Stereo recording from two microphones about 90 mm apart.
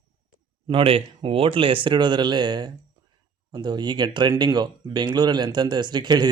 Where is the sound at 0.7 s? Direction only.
85° right.